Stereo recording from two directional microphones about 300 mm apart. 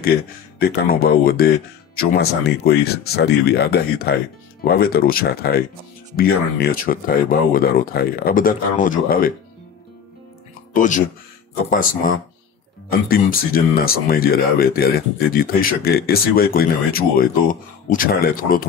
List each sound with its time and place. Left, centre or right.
0.0 s speech: left
10.7 s speech: left
13.1 s speech: left